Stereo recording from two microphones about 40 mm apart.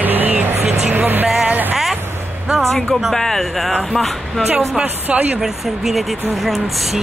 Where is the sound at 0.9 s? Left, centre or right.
Right.